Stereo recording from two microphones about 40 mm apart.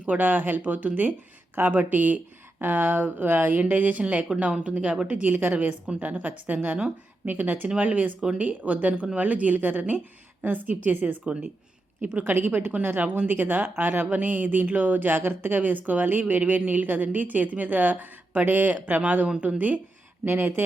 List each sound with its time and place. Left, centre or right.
0.0 s speech: right
0.6 s a woman's voice: right
3.6 s a woman's voice: right
4.9 s speech: right
5.2 s a woman's voice: right
12.3 s a woman's voice: right
20.2 s speech: right